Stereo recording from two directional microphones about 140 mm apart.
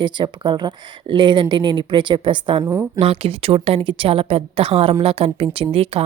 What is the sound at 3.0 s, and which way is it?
A woman's voice, 45° right (ahead or behind).